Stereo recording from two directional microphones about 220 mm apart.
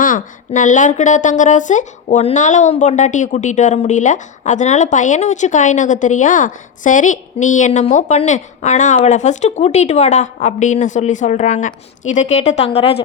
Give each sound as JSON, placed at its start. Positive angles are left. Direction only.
{"t": 0.0, "sound": "a woman's voice", "side_deg": 35}